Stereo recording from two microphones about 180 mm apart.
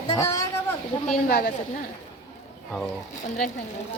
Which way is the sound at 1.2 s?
55° left (ahead or behind).